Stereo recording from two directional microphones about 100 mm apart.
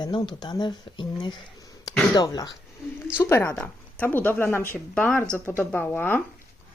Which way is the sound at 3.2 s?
25° left (ahead or behind).